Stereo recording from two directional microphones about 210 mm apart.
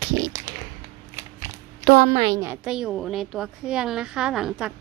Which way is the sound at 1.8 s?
55° right (ahead or behind).